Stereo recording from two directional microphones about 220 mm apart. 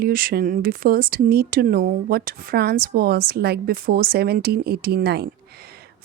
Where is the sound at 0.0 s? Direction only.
40° right (ahead or behind).